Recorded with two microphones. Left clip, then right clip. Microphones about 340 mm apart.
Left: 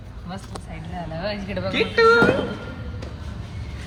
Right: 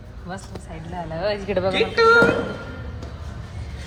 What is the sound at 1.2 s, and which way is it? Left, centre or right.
Speech, right.